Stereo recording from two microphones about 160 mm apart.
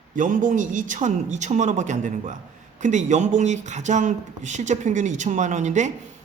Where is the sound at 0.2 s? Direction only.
55° right (ahead or behind).